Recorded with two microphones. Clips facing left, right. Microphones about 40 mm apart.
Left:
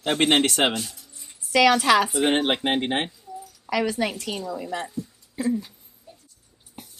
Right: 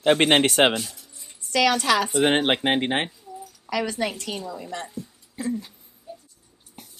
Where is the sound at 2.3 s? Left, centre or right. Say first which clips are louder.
Right 1 dB; right.